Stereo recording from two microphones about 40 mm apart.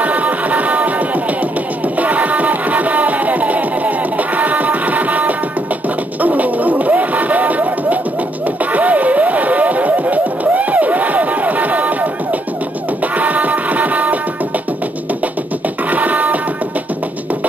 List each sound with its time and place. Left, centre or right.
0.0 s music: right
6.2 s a sound: right
13.2 s music: right
15.9 s music: right